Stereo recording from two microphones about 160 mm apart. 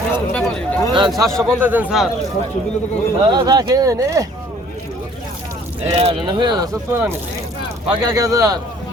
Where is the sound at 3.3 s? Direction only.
25° right (ahead or behind).